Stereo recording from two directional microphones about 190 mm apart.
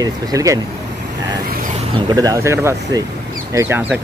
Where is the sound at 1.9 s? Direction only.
20° right (ahead or behind).